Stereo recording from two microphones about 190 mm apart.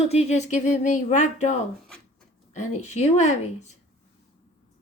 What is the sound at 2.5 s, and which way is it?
Speech, 40° left (ahead or behind).